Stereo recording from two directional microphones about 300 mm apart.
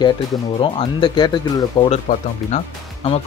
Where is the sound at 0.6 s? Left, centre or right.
Centre.